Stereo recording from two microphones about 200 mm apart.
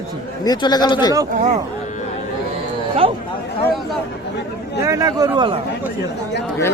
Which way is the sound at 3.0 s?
25° right (ahead or behind).